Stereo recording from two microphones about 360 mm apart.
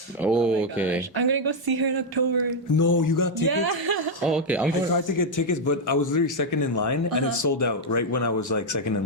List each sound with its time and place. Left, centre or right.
0.2 s speech: centre
1.1 s speech: right
2.7 s a sound: left
3.4 s music: right
4.3 s speech: centre
5.1 s a man's voice: left